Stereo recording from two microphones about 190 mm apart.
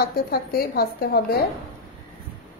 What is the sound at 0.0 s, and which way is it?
A woman's voice, 50° left (ahead or behind).